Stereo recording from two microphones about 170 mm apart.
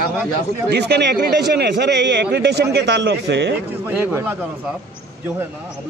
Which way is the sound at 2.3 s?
75° right (ahead or behind).